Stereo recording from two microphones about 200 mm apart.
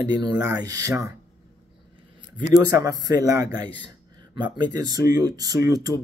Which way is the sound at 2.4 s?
15° right (ahead or behind).